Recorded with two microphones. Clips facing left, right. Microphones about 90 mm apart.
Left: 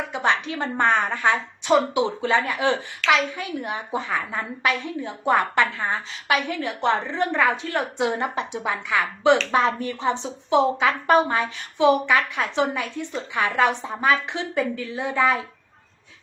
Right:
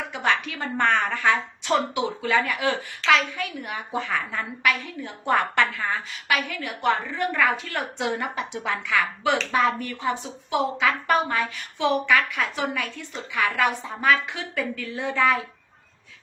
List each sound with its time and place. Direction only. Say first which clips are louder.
0.1 s a woman's voice: left 1 dB; 20° left (ahead or behind)